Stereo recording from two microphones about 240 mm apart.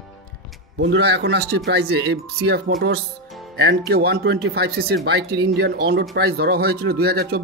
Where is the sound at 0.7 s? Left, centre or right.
Right.